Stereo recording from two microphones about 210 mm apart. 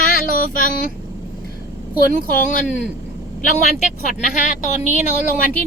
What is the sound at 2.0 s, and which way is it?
Speech, 40° left (ahead or behind).